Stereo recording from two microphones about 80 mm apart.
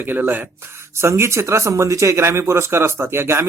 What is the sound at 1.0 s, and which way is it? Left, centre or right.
Speech, right.